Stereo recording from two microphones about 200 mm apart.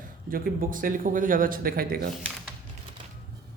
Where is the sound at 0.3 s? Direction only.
45° right (ahead or behind).